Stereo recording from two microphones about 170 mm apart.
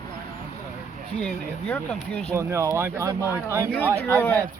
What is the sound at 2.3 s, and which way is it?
Speech, 15° right (ahead or behind).